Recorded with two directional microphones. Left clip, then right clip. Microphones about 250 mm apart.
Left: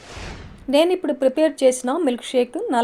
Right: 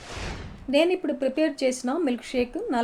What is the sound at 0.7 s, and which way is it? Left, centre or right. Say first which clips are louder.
Speech: left 5 dB; left.